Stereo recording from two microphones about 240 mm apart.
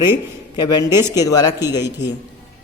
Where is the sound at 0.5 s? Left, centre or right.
Centre.